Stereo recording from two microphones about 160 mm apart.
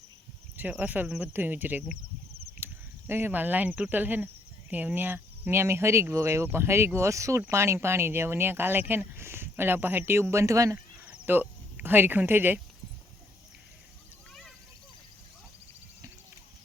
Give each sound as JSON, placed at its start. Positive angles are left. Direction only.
{"t": 0.5, "sound": "speech", "side_deg": -10}
{"t": 3.1, "sound": "speech", "side_deg": -15}